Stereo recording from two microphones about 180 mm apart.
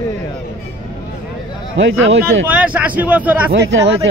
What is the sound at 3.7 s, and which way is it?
Speech, 90° right.